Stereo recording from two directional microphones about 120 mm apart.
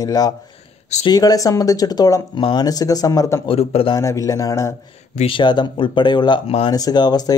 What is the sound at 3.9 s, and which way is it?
Speech, 30° left (ahead or behind).